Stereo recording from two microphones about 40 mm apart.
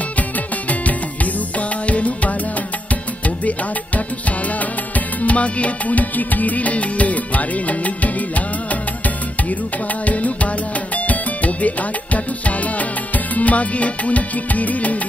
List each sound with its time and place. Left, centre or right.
1.9 s music: left
4.9 s music: left
10.0 s music: left